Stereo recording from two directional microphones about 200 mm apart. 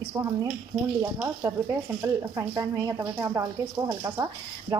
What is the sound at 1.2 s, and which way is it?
Speech, 15° right (ahead or behind).